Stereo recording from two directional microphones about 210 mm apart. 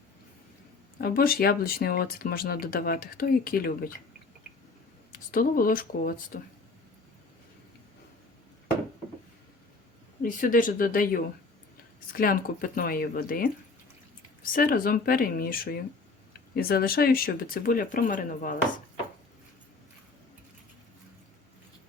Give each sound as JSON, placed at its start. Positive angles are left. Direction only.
{"t": 1.0, "sound": "speech", "side_deg": 45}
{"t": 5.1, "sound": "speech", "side_deg": 40}
{"t": 10.2, "sound": "speech", "side_deg": 40}
{"t": 14.5, "sound": "speech", "side_deg": 45}